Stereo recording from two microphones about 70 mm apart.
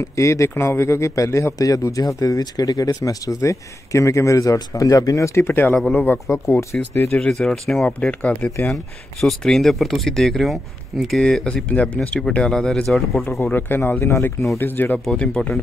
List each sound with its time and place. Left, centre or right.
0.0 s a man's voice: left
6.2 s a man's voice: left
7.2 s speech: centre
8.0 s speech: centre
9.2 s speech: centre
13.5 s speech: left
14.6 s speech: left
15.0 s speech: centre